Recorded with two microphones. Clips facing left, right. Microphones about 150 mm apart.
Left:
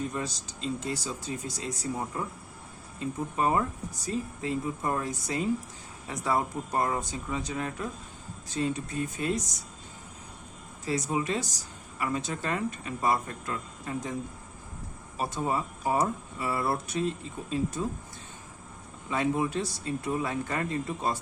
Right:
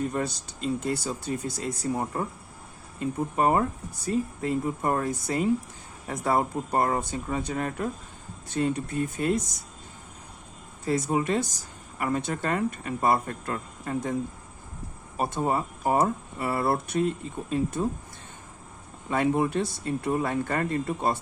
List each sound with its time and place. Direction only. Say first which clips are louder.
0.1 s speech: right 5 dB; 60° right (ahead or behind)
3.3 s speech: right 3 dB; 50° right (ahead or behind)
10.8 s speech: right 4 dB; 50° right (ahead or behind)
15.2 s speech: right 3 dB; 55° right (ahead or behind)
19.1 s speech: right 4 dB; 55° right (ahead or behind)